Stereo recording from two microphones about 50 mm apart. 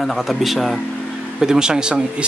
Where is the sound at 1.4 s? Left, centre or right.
Centre.